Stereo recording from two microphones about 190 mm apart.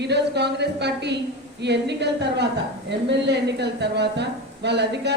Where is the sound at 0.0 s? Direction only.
60° right (ahead or behind).